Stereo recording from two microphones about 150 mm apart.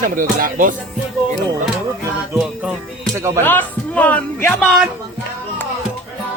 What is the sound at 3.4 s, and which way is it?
Speech, 15° left (ahead or behind).